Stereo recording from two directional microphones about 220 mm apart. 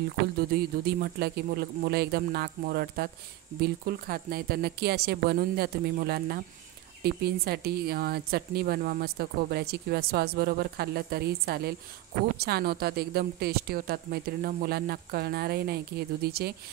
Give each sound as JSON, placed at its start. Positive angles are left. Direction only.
{"t": 0.4, "sound": "a woman's voice", "side_deg": -45}